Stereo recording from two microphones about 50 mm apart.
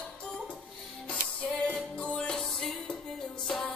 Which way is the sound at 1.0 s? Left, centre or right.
Left.